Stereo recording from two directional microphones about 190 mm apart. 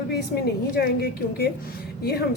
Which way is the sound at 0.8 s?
55° left (ahead or behind).